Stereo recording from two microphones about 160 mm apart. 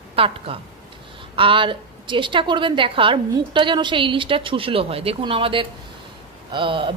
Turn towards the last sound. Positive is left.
turn(degrees=-30)  # may be behind; listen again after turning